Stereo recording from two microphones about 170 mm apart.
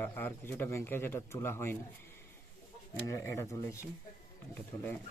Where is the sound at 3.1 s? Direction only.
15° left (ahead or behind).